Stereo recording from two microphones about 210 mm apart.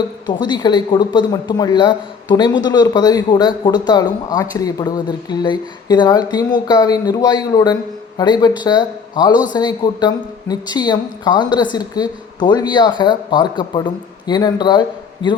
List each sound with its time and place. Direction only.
0.3 s speech: 20° left (ahead or behind)